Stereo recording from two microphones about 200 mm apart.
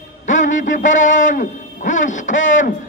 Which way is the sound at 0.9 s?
70° left (ahead or behind).